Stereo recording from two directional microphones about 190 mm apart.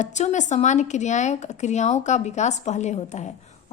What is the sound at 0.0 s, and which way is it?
A woman's voice, 40° left (ahead or behind).